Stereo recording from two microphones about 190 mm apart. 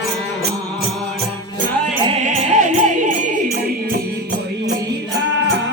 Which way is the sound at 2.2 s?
40° right (ahead or behind).